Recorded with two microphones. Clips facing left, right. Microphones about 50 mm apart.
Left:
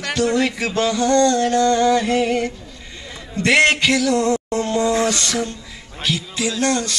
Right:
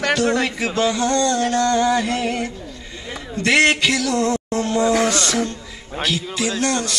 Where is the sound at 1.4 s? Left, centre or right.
Right.